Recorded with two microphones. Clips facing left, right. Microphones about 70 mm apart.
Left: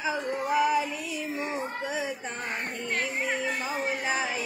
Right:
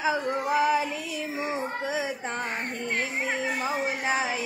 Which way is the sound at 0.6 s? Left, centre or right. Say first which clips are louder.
Right 1 dB; right.